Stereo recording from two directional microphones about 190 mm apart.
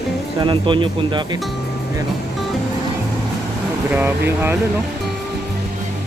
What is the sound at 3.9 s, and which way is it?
Speech, 10° right (ahead or behind).